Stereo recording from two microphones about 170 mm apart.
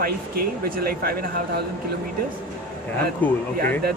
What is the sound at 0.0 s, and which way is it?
Speech, 60° right (ahead or behind).